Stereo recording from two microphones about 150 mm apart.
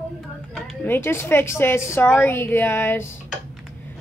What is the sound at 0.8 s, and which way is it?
A child's voice, 15° left (ahead or behind).